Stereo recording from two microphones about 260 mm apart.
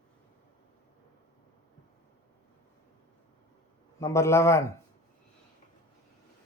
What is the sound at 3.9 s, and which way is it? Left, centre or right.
Speech, centre.